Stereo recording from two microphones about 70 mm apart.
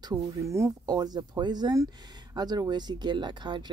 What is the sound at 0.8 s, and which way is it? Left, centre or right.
Speech, right.